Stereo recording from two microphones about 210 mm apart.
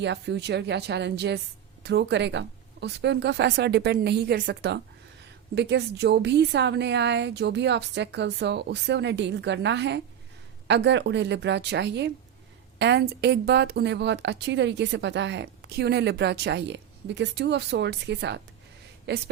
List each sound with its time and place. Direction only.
0.0 s speech: 55° right (ahead or behind)